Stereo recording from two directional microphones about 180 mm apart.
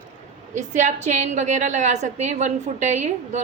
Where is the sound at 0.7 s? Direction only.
40° right (ahead or behind).